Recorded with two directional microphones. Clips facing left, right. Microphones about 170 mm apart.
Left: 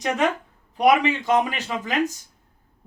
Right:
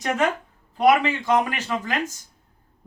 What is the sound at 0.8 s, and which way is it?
A man's voice, 20° left (ahead or behind).